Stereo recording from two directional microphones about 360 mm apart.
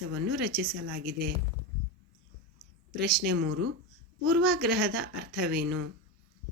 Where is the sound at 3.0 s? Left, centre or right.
Centre.